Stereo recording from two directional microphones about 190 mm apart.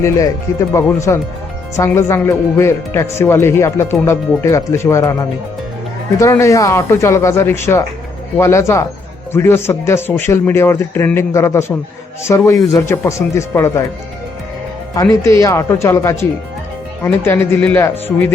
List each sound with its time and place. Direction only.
0.0 s speech: 15° left (ahead or behind)
14.9 s speech: 15° left (ahead or behind)